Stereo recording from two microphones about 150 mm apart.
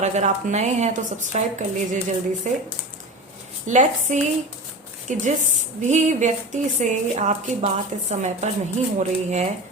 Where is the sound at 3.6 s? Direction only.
55° right (ahead or behind).